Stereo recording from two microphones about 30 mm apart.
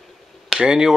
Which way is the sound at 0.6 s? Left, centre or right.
Right.